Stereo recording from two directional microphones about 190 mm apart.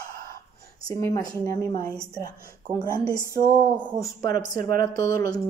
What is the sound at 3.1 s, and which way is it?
Speech, 15° right (ahead or behind).